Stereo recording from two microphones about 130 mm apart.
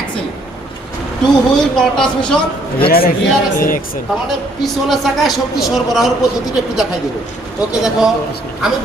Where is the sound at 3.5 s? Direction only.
90° left.